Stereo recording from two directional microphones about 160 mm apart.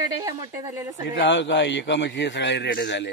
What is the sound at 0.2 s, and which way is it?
Speech, 20° right (ahead or behind).